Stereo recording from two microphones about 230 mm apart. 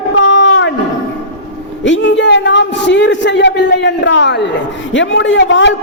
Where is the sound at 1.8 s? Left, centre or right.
Left.